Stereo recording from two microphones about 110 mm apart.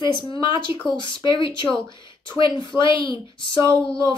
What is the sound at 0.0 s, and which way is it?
Speech, 45° left (ahead or behind).